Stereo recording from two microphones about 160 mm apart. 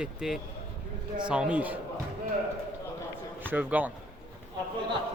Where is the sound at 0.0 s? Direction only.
5° right (ahead or behind).